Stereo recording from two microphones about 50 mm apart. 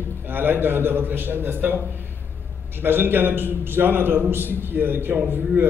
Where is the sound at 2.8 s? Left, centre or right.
Right.